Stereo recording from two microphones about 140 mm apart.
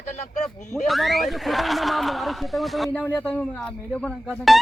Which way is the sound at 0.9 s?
Centre (ahead or behind).